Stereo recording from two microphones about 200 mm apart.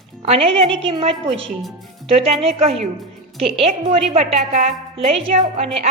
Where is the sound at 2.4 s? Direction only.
30° right (ahead or behind).